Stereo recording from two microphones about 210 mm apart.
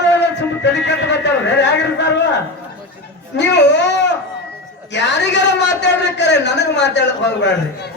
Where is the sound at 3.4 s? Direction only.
55° left (ahead or behind).